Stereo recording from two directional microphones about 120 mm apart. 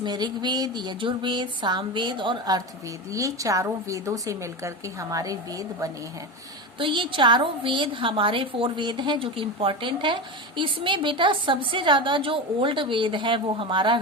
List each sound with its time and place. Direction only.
0.0 s a woman's voice: 40° right (ahead or behind)
6.7 s a woman's voice: 45° right (ahead or behind)